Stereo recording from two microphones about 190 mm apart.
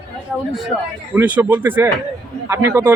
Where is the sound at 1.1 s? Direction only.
10° right (ahead or behind).